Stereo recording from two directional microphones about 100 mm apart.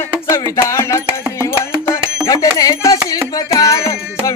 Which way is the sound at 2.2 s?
35° left (ahead or behind).